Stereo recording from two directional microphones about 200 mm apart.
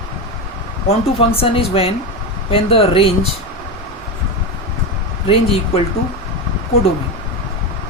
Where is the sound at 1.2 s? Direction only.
30° left (ahead or behind).